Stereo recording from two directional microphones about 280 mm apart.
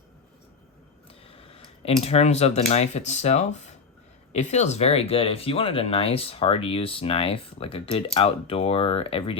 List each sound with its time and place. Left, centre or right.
1.5 s speech: left